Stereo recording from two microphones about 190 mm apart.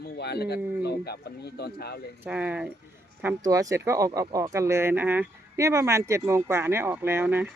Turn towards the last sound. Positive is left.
turn(degrees=-10)  # may be behind; listen again after turning